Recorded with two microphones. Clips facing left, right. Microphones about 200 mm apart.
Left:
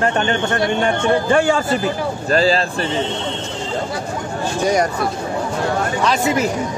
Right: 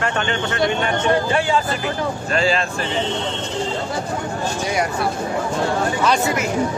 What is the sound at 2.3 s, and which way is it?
Speech, 35° left (ahead or behind).